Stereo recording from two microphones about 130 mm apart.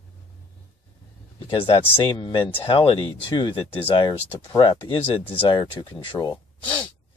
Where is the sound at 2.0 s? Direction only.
35° left (ahead or behind).